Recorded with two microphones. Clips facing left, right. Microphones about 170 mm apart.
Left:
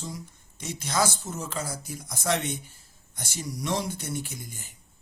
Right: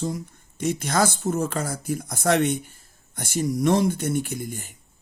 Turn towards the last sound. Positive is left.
turn(degrees=-55)  # may be behind; listen again after turning